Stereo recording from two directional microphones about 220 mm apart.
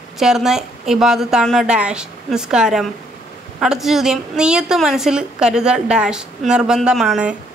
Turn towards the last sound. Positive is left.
turn(degrees=0)  # may be behind; listen again after turning